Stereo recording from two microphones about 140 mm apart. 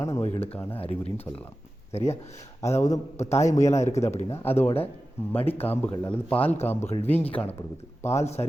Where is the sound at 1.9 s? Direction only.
50° left (ahead or behind).